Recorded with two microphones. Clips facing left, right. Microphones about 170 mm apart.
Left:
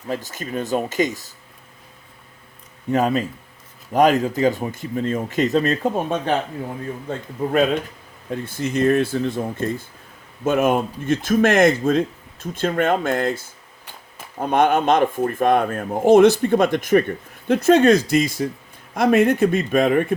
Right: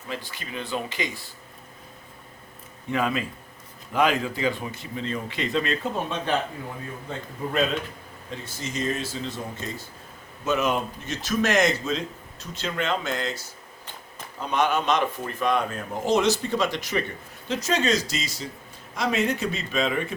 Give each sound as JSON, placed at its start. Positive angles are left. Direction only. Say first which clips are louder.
{"t": 0.1, "sound": "speech", "louder": "left 8 dB", "side_deg": 45}
{"t": 2.9, "sound": "speech", "louder": "left 6 dB", "side_deg": 40}